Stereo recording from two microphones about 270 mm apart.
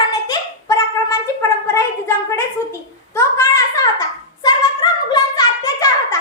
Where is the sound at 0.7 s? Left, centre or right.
Centre.